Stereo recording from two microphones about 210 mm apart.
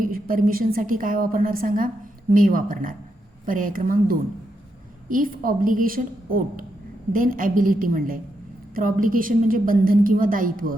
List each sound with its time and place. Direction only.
0.0 s a woman's voice: 40° right (ahead or behind)